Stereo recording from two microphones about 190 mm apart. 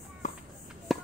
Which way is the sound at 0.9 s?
Centre (ahead or behind).